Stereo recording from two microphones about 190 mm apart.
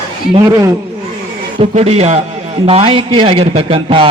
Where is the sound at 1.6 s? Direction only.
35° right (ahead or behind).